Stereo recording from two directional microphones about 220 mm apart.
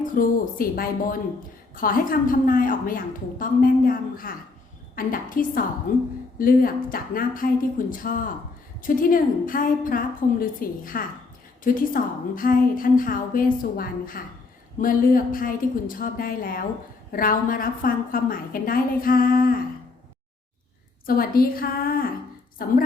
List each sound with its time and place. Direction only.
0.0 s a woman's voice: 40° left (ahead or behind)
21.2 s a woman's voice: 40° left (ahead or behind)